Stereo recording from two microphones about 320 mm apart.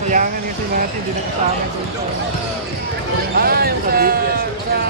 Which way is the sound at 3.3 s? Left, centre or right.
Right.